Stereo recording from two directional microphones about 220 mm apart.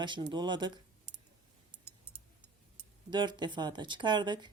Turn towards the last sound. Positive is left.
turn(degrees=-20)  # may be behind; listen again after turning